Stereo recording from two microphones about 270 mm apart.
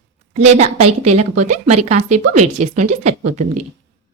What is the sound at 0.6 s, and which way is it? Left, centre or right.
A woman's voice, right.